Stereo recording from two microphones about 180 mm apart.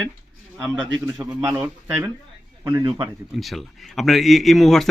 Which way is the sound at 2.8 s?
30° right (ahead or behind).